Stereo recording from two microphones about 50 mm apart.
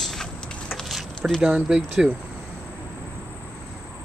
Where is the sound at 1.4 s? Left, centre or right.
Centre.